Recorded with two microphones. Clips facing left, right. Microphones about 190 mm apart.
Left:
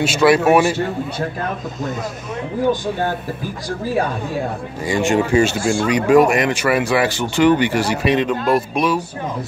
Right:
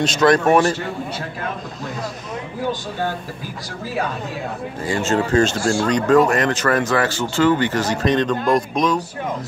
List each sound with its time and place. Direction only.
0.0 s speech: 10° left (ahead or behind)
4.8 s speech: 15° left (ahead or behind)